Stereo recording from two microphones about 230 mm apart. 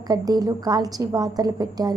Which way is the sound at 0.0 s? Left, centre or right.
Centre.